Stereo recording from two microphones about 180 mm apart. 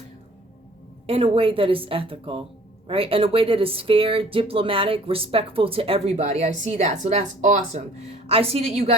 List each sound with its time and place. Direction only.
1.0 s a woman's voice: 30° right (ahead or behind)